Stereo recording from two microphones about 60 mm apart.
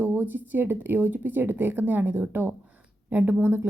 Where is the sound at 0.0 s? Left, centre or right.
Right.